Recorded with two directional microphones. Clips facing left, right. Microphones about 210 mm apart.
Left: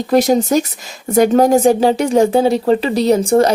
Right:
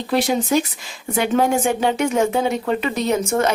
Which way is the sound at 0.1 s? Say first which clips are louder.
Left 6 dB; 40° left (ahead or behind).